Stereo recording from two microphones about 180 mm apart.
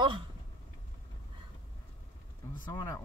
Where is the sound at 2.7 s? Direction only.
15° left (ahead or behind).